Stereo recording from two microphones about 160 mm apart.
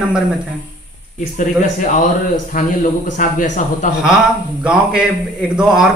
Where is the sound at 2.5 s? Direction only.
60° left (ahead or behind).